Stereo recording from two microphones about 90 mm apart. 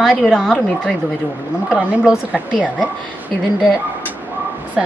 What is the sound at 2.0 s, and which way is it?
Speech, 15° right (ahead or behind).